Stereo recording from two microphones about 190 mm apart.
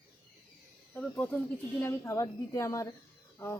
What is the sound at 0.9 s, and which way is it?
A woman's voice, 10° left (ahead or behind).